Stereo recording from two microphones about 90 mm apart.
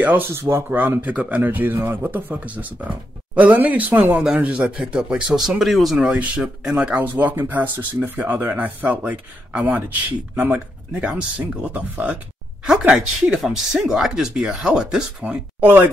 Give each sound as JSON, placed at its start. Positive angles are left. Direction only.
{"t": 0.0, "sound": "speech", "side_deg": -20}
{"t": 5.9, "sound": "speech", "side_deg": -15}